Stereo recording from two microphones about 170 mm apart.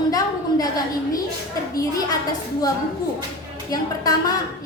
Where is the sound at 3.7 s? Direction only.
20° left (ahead or behind).